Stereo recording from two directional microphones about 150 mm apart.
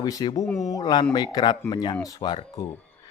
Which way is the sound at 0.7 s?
25° left (ahead or behind).